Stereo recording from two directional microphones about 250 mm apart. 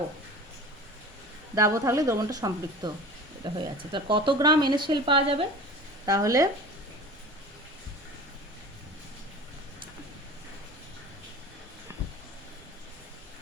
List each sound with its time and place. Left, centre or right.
1.5 s speech: centre